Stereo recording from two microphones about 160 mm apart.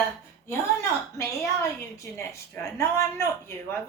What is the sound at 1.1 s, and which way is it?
A woman's voice, 15° left (ahead or behind).